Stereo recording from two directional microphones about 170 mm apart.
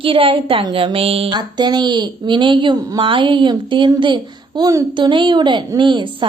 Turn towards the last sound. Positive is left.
turn(degrees=-30)  # may be behind; listen again after turning